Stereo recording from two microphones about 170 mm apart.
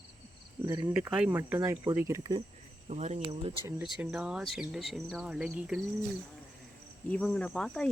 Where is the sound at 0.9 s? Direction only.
10° right (ahead or behind).